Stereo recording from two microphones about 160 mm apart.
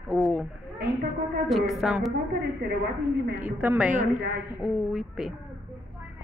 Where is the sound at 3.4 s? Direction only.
10° right (ahead or behind).